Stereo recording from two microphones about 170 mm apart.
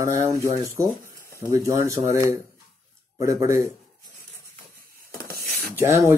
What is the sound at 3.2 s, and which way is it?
Speech, 15° right (ahead or behind).